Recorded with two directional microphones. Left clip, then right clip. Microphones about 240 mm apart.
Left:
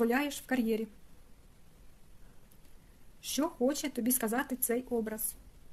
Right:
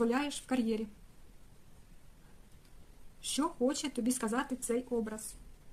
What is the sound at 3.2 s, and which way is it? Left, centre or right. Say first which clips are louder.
Speech: left 1 dB; left.